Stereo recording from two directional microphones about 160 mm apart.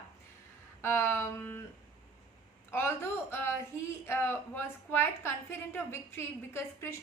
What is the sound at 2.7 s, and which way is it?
A woman's voice, 15° left (ahead or behind).